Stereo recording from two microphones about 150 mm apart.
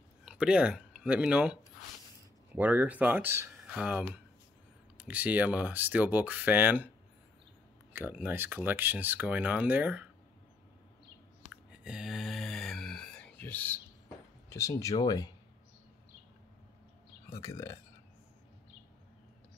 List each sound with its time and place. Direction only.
0.2 s speech: 5° right (ahead or behind)
7.9 s speech: 10° right (ahead or behind)
11.8 s a sound: 5° right (ahead or behind)
14.5 s speech: 20° left (ahead or behind)
17.3 s speech: 20° left (ahead or behind)